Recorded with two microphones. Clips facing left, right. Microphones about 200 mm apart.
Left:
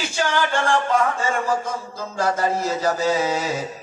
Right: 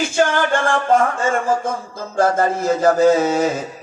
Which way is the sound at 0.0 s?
50° right (ahead or behind).